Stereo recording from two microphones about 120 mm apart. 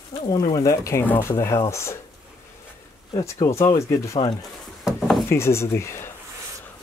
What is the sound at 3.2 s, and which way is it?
Speech, 25° left (ahead or behind).